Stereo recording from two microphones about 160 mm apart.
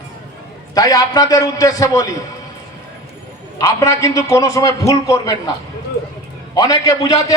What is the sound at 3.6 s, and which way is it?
A man's voice, 20° left (ahead or behind).